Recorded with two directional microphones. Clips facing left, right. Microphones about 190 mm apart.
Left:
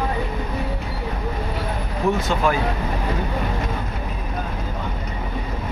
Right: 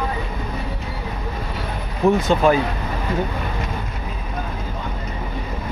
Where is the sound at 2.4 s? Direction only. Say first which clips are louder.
Right 5 dB; 20° right (ahead or behind).